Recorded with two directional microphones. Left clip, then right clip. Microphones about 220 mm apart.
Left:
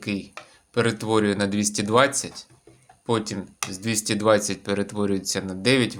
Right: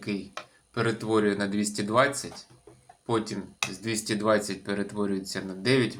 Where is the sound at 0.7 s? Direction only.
55° left (ahead or behind).